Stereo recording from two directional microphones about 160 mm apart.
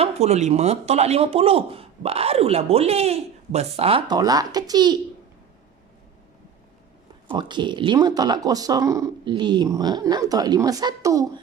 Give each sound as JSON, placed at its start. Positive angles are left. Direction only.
{"t": 0.0, "sound": "a man's voice", "side_deg": -40}
{"t": 4.1, "sound": "speech", "side_deg": -25}
{"t": 7.3, "sound": "speech", "side_deg": -30}